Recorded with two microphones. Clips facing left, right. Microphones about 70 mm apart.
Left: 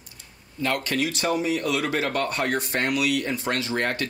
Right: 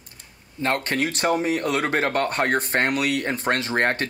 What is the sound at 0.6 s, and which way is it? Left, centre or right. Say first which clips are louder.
Speech: right 2 dB; right.